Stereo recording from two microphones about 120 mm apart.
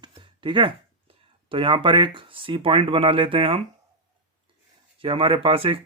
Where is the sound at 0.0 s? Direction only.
45° right (ahead or behind).